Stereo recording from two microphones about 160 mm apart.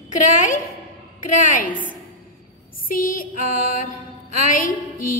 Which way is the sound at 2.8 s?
60° left (ahead or behind).